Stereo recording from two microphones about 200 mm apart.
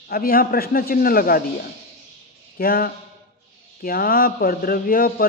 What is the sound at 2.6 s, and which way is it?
A man's voice, 50° left (ahead or behind).